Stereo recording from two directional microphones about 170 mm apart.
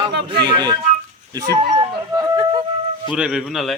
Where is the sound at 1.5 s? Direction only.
25° right (ahead or behind).